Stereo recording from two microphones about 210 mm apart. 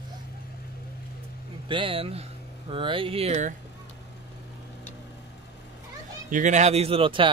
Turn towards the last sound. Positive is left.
turn(degrees=-25)  # may be behind; listen again after turning